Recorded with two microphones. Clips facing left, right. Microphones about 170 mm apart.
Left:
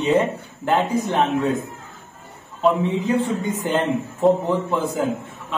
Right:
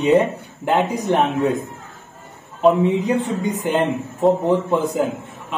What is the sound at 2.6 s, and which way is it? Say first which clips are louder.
A woman's voice: right 4 dB; 15° right (ahead or behind).